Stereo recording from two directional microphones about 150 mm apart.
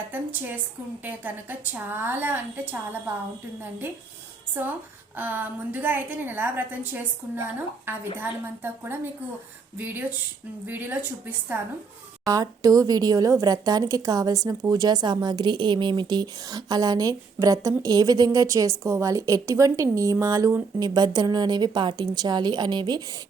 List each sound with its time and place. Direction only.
0.1 s a woman's voice: 10° right (ahead or behind)
5.1 s a woman's voice: 10° right (ahead or behind)
12.2 s a woman's voice: 25° right (ahead or behind)